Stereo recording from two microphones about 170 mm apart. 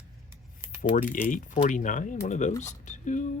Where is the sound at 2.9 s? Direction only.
45° left (ahead or behind).